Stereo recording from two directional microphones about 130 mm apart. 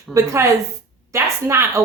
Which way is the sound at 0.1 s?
25° right (ahead or behind).